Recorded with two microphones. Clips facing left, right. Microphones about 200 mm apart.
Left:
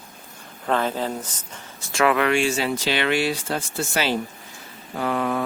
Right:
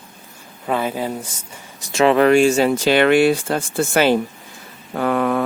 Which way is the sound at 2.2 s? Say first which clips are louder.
Right 8 dB; 40° right (ahead or behind).